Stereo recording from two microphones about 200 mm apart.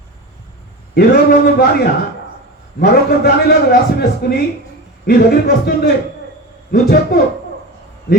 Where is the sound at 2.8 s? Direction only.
50° left (ahead or behind).